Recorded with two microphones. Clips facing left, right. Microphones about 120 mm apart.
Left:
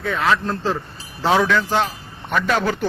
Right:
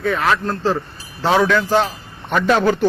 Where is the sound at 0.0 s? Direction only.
Centre (ahead or behind).